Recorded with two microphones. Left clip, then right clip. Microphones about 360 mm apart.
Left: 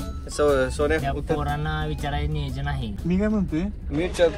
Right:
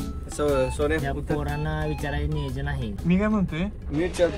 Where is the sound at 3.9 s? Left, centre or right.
Left.